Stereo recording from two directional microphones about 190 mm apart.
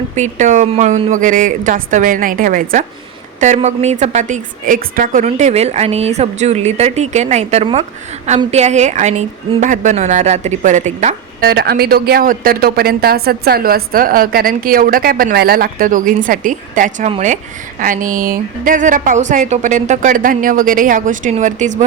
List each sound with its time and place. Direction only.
0.2 s a woman's voice: 40° right (ahead or behind)
11.4 s speech: 55° right (ahead or behind); by 21.8 s 40° right (ahead or behind)